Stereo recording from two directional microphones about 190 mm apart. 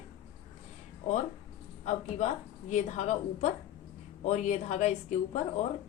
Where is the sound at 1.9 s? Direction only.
35° left (ahead or behind).